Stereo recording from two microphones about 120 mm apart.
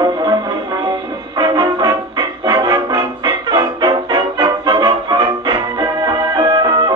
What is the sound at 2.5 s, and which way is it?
Music, 35° right (ahead or behind).